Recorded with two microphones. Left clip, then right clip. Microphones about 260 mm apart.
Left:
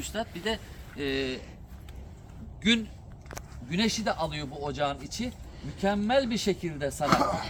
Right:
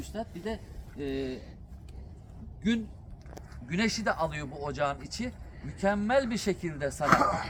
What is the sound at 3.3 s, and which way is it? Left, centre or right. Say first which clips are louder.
A man's voice: left 2 dB; centre.